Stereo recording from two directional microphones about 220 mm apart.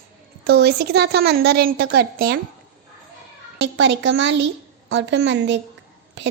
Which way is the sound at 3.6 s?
55° right (ahead or behind).